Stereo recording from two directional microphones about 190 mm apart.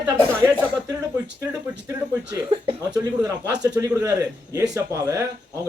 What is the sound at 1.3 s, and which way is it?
Speech, 15° right (ahead or behind).